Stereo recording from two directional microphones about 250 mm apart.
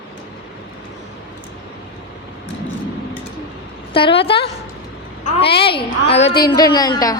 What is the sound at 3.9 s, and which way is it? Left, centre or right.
Speech, left.